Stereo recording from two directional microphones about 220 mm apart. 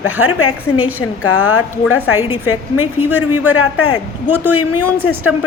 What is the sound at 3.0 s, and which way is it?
Speech, 90° left.